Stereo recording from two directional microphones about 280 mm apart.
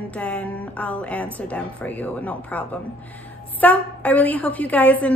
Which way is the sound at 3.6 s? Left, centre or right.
Centre.